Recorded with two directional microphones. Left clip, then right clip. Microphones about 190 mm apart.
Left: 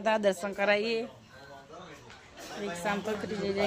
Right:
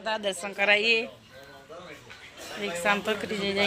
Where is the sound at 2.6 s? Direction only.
10° right (ahead or behind).